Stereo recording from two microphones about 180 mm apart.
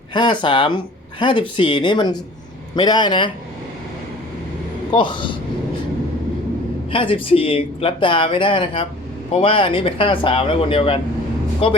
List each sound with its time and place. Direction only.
0.1 s speech: 25° left (ahead or behind)
4.9 s speech: 25° left (ahead or behind)
6.9 s speech: 30° left (ahead or behind)